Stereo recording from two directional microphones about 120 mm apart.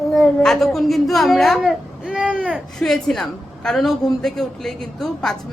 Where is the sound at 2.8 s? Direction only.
5° left (ahead or behind).